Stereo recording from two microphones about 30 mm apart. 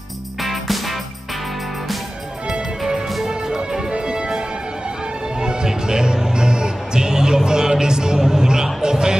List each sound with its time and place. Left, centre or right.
0.4 s music: centre
3.5 s music: right